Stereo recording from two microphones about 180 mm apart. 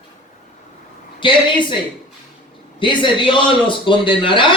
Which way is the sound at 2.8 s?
25° left (ahead or behind).